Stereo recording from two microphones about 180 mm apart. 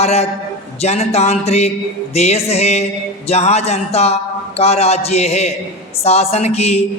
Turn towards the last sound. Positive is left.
turn(degrees=35)  # may be behind; listen again after turning